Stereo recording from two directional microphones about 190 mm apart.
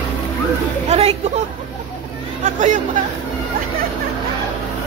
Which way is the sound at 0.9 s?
30° right (ahead or behind).